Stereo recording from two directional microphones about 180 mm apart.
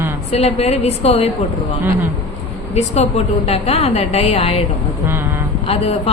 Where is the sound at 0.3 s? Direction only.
35° left (ahead or behind).